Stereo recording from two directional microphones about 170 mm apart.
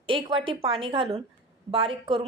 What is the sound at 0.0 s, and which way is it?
A woman's voice, 30° right (ahead or behind).